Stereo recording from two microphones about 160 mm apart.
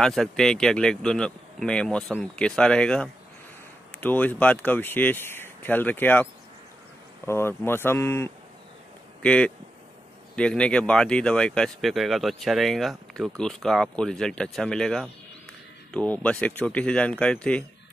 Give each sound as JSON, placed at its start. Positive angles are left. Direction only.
{"t": 0.0, "sound": "speech", "side_deg": 0}
{"t": 7.2, "sound": "speech", "side_deg": 15}